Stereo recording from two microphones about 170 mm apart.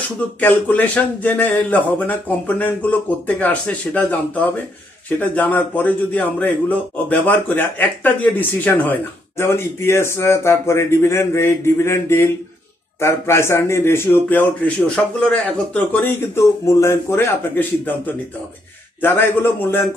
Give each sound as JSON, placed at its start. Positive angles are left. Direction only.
{"t": 0.4, "sound": "speech", "side_deg": 10}
{"t": 5.2, "sound": "speech", "side_deg": 10}